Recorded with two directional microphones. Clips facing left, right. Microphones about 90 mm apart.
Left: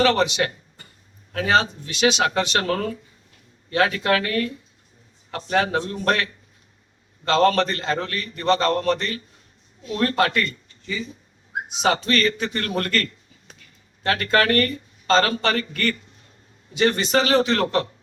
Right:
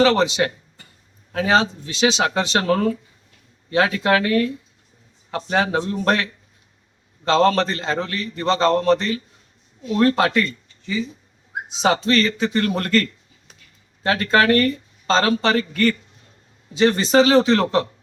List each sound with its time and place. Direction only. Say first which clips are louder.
0.0 s speech: right 3 dB; 30° right (ahead or behind)
7.3 s speech: right 1 dB; 25° right (ahead or behind)
11.8 s speech: right 3 dB; 25° right (ahead or behind)